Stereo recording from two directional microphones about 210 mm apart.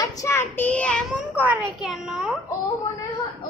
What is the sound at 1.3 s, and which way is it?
A child's voice, 5° right (ahead or behind).